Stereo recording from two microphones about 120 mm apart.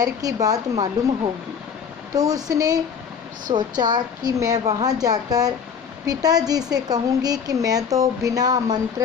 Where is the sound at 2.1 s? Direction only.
30° right (ahead or behind).